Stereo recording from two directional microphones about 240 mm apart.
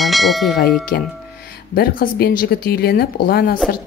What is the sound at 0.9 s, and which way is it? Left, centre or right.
Speech, left.